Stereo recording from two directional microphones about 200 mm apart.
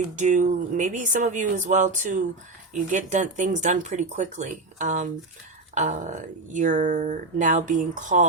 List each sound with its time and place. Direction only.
0.2 s speech: 40° right (ahead or behind)